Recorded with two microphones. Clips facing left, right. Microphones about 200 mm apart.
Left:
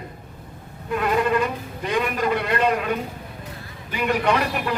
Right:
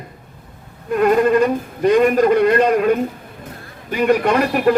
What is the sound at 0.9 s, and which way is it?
A man's voice, 45° right (ahead or behind).